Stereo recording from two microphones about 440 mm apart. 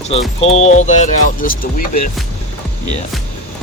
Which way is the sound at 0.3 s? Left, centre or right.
Centre.